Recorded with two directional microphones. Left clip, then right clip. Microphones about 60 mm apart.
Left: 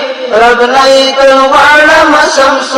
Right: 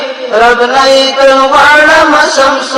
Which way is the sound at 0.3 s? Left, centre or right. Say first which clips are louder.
Left 1 dB; right.